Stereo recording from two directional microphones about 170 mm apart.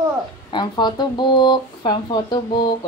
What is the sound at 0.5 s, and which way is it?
Speech, 25° left (ahead or behind).